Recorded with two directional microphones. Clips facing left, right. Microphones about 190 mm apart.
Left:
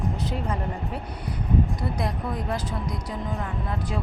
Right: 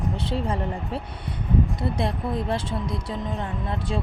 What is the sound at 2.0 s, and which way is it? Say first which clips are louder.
Speech: right 3 dB; 25° right (ahead or behind).